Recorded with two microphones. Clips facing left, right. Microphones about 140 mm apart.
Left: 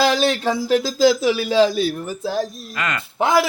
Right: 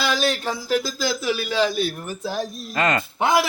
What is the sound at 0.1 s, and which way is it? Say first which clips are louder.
A man's voice: left 4 dB; 25° left (ahead or behind).